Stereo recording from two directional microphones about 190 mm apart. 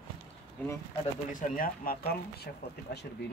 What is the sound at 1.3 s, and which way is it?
Speech, 50° left (ahead or behind).